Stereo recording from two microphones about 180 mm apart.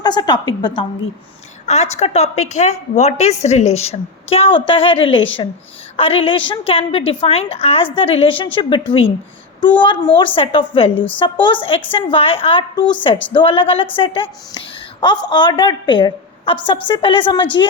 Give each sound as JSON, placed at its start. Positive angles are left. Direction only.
{"t": 0.0, "sound": "a woman's voice", "side_deg": 25}
{"t": 1.6, "sound": "a woman's voice", "side_deg": 40}
{"t": 10.9, "sound": "a woman's voice", "side_deg": 10}
{"t": 11.2, "sound": "a woman's voice", "side_deg": 25}